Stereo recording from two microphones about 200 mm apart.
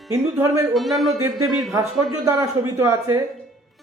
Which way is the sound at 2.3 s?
15° right (ahead or behind).